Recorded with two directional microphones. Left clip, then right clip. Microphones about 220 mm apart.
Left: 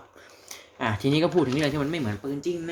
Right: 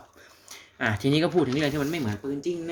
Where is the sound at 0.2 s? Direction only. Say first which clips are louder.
Left 3 dB; 5° right (ahead or behind).